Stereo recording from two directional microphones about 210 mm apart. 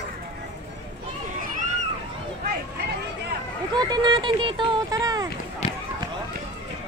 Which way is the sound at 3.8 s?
20° right (ahead or behind).